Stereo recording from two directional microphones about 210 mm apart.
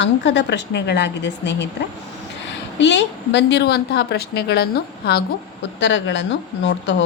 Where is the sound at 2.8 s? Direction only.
55° left (ahead or behind).